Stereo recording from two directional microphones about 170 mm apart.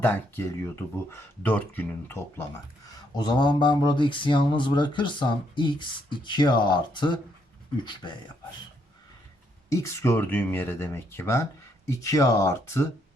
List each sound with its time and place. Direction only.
0.0 s speech: 10° left (ahead or behind)
2.8 s mantra: 20° left (ahead or behind)
9.6 s speech: 15° left (ahead or behind)